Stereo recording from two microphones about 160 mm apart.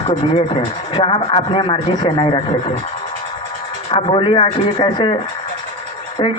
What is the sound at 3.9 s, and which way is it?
Speech, 30° left (ahead or behind).